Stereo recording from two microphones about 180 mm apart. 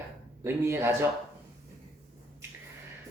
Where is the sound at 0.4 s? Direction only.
15° right (ahead or behind).